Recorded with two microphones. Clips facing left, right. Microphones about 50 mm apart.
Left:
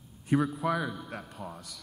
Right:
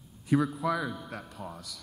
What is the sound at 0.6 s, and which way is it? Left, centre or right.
Speech, left.